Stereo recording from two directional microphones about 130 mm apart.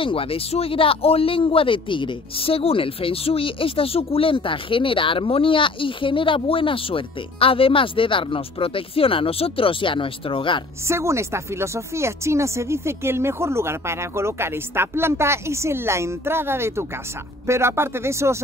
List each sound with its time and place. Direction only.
0.0 s speech: 45° left (ahead or behind)
10.9 s speech: 20° right (ahead or behind)